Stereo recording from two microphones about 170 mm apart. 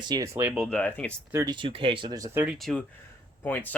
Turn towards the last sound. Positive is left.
turn(degrees=10)  # may be behind; listen again after turning